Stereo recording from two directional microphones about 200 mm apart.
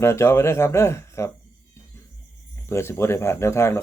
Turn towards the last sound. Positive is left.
turn(degrees=15)  # may be behind; listen again after turning